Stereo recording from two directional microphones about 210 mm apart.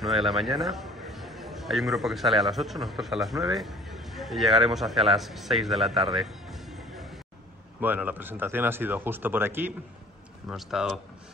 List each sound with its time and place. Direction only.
0.0 s a man's voice: centre (ahead or behind)